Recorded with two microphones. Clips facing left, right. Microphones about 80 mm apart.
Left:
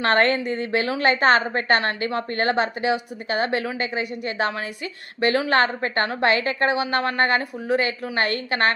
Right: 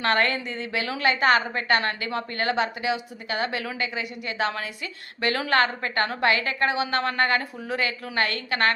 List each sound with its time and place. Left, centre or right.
0.0 s a woman's voice: left